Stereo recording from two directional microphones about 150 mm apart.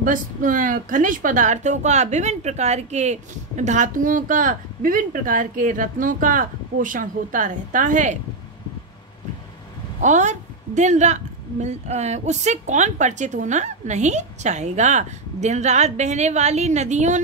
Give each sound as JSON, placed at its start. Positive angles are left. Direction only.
{"t": 0.0, "sound": "a woman's voice", "side_deg": -65}
{"t": 10.0, "sound": "a woman's voice", "side_deg": -55}